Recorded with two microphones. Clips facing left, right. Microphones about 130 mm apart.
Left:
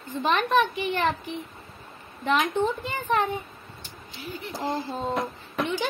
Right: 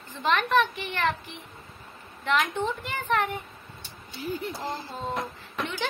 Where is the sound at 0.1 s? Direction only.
15° left (ahead or behind).